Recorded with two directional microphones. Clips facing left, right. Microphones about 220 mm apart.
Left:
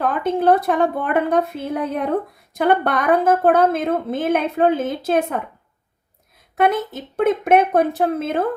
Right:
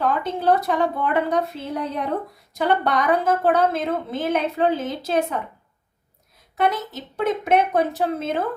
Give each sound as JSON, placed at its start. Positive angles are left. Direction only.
{"t": 0.0, "sound": "a woman's voice", "side_deg": 55}
{"t": 6.6, "sound": "a woman's voice", "side_deg": 55}